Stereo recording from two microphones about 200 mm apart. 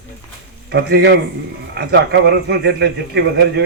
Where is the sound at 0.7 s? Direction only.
55° right (ahead or behind).